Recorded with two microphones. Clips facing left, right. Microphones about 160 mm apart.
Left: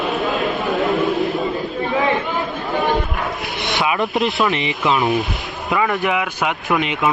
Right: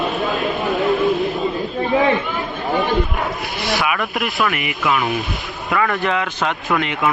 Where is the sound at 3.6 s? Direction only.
20° left (ahead or behind).